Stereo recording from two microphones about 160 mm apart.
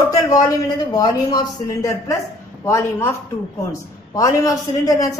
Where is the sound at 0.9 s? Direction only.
25° left (ahead or behind).